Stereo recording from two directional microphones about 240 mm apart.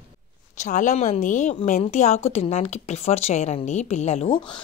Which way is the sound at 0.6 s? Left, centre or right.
Left.